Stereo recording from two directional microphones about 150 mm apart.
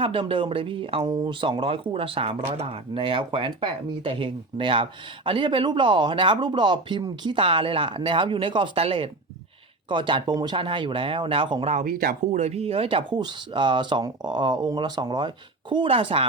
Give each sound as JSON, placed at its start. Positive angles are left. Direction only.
{"t": 0.0, "sound": "speech", "side_deg": -35}
{"t": 11.7, "sound": "speech", "side_deg": -60}